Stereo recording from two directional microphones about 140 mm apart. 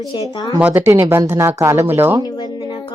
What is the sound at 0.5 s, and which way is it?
Speech, 15° right (ahead or behind).